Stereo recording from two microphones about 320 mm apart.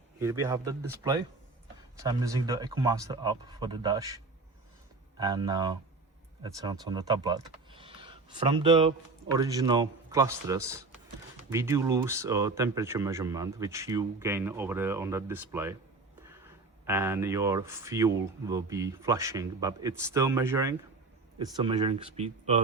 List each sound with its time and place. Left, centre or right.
0.2 s speech: centre
16.8 s speech: centre